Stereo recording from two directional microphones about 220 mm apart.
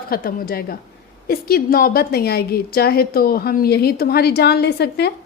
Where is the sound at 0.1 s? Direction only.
40° left (ahead or behind).